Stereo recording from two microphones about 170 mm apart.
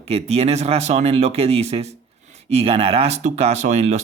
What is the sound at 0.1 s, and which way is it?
Speech, 40° right (ahead or behind).